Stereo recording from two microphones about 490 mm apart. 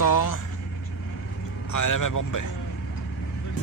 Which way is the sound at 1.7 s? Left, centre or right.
Left.